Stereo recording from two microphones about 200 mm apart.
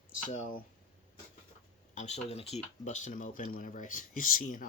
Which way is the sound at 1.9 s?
35° left (ahead or behind).